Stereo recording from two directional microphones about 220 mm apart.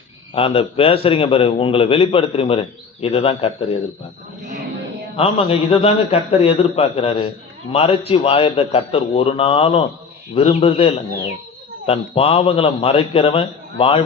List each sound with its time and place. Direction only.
0.3 s a man's voice: 25° left (ahead or behind)
5.1 s a man's voice: 25° left (ahead or behind)